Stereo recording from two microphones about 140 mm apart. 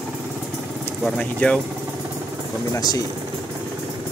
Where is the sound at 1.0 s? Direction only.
10° left (ahead or behind).